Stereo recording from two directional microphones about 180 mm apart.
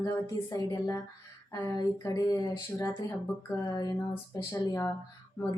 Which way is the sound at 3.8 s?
20° left (ahead or behind).